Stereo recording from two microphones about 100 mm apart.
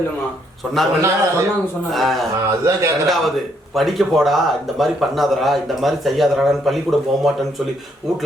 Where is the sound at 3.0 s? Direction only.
Centre (ahead or behind).